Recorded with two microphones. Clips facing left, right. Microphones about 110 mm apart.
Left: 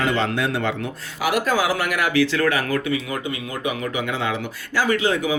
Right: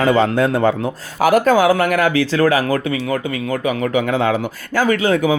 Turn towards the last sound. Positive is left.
turn(degrees=-45)  # may be behind; listen again after turning